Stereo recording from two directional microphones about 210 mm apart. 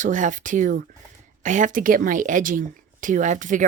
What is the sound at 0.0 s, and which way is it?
A woman's voice, 35° right (ahead or behind).